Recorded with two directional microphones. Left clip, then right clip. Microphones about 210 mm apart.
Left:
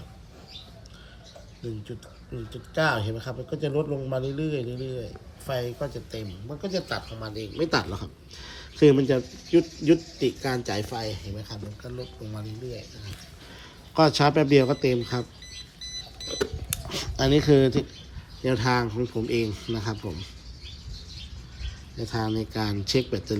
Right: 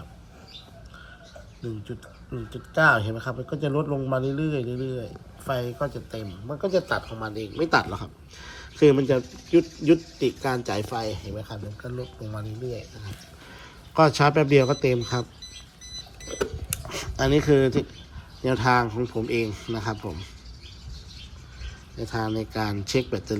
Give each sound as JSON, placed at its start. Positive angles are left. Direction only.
{"t": 2.5, "sound": "speech", "side_deg": 0}
{"t": 3.7, "sound": "speech", "side_deg": -35}
{"t": 4.3, "sound": "speech", "side_deg": 0}
{"t": 4.6, "sound": "speech", "side_deg": -30}
{"t": 5.5, "sound": "speech", "side_deg": 0}
{"t": 11.8, "sound": "speech", "side_deg": -20}
{"t": 13.9, "sound": "speech", "side_deg": 20}
{"t": 16.1, "sound": "a sound", "side_deg": 0}
{"t": 16.4, "sound": "speech", "side_deg": 10}
{"t": 21.9, "sound": "speech", "side_deg": 20}